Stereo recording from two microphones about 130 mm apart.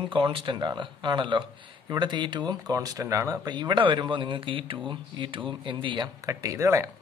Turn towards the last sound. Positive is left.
turn(degrees=-20)  # may be behind; listen again after turning